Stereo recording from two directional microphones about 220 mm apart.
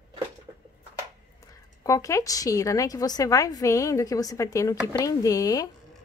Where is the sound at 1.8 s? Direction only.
15° left (ahead or behind).